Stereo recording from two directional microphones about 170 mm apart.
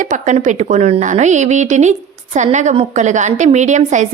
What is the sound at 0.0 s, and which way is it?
A woman's voice, 45° right (ahead or behind).